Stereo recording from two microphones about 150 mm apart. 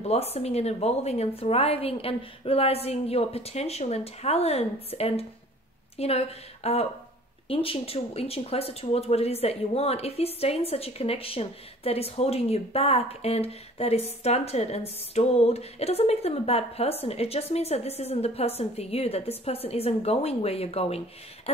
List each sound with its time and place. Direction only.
0.0 s speech: 45° left (ahead or behind)